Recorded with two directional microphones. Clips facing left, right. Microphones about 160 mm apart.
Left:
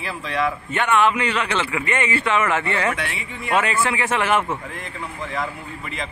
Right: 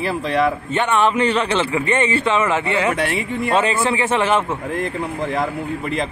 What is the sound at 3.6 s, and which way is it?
A man's voice, 25° right (ahead or behind).